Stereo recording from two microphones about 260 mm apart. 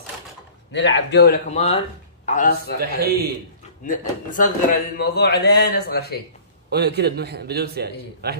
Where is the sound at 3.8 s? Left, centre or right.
Left.